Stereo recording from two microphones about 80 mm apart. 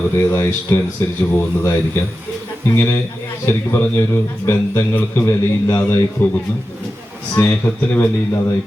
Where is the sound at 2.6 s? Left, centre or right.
Left.